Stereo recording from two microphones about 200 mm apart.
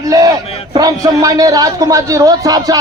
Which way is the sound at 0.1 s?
15° right (ahead or behind).